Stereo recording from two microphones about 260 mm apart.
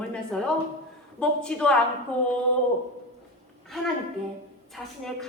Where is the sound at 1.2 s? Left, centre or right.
Centre.